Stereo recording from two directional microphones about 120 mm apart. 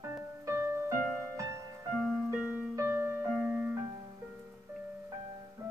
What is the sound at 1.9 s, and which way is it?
Music, centre (ahead or behind).